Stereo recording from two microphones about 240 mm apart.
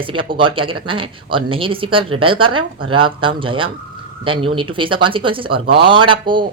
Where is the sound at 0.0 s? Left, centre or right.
Right.